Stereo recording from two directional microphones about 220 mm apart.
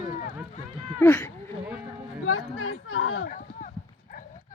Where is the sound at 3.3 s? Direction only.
35° left (ahead or behind).